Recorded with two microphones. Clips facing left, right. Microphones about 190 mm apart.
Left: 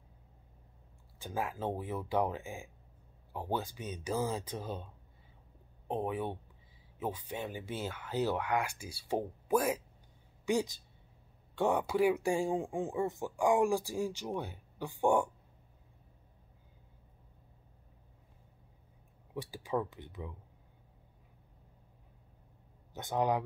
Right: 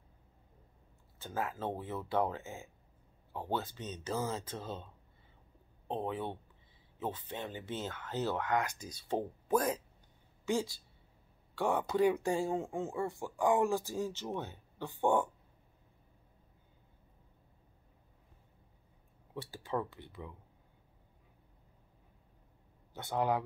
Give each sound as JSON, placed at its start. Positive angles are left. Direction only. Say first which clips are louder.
{"t": 1.2, "sound": "speech", "louder": "left 1 dB", "side_deg": 15}
{"t": 5.9, "sound": "speech", "louder": "left 2 dB", "side_deg": 15}
{"t": 11.8, "sound": "speech", "louder": "even", "side_deg": 10}
{"t": 19.3, "sound": "speech", "louder": "left 2 dB", "side_deg": 15}
{"t": 22.9, "sound": "speech", "louder": "left 1 dB", "side_deg": 15}